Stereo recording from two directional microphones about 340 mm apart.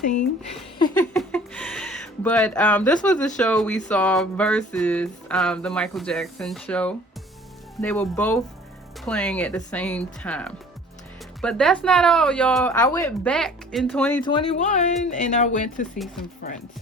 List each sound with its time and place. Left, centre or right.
0.8 s speech: centre
14.3 s speech: centre